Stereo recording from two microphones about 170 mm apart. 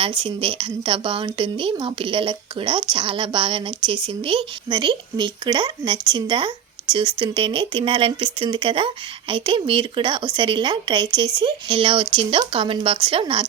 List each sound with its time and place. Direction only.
0.2 s speech: 30° right (ahead or behind)